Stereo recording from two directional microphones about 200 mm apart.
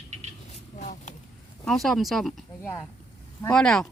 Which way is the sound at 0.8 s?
35° left (ahead or behind).